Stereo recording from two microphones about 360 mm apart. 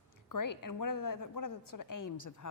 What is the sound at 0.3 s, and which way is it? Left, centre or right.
A woman's voice, left.